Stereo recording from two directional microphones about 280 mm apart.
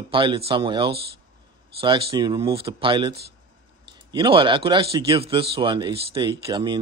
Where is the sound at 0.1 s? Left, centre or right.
Centre.